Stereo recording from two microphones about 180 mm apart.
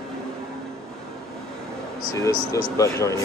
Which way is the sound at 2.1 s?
20° left (ahead or behind).